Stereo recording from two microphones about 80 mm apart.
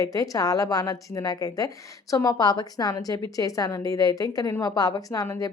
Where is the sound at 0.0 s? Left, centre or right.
Left.